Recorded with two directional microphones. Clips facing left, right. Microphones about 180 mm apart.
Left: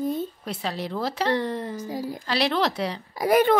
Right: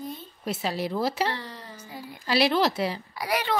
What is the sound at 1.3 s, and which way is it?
Speech, 50° left (ahead or behind).